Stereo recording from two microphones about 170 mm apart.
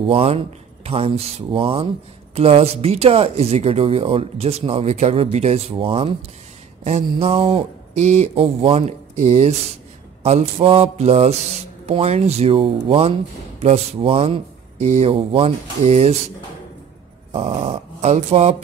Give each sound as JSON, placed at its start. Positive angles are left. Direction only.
{"t": 0.0, "sound": "speech", "side_deg": -35}
{"t": 17.3, "sound": "speech", "side_deg": -35}